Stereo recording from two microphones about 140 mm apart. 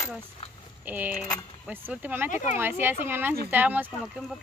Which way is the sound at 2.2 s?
65° left (ahead or behind).